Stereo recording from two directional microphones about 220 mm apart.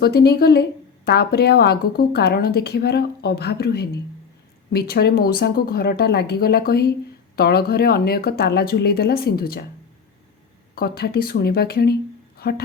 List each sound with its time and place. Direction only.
0.0 s a woman's voice: 45° left (ahead or behind)
10.8 s a woman's voice: 45° left (ahead or behind)